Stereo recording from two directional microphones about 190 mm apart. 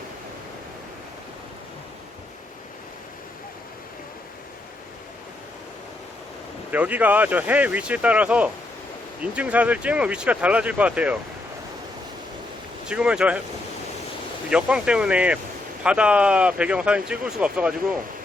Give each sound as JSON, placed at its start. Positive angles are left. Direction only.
{"t": 6.7, "sound": "speech", "side_deg": -10}
{"t": 12.9, "sound": "speech", "side_deg": -5}
{"t": 14.5, "sound": "speech", "side_deg": -5}